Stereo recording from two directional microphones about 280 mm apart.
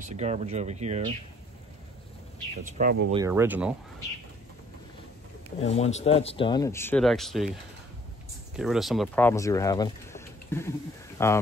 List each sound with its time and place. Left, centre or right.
0.0 s speech: right
2.6 s speech: right
3.1 s speech: centre
5.7 s speech: left; by 7.5 s centre
8.5 s speech: centre